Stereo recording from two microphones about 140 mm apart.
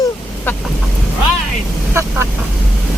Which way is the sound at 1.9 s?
20° right (ahead or behind).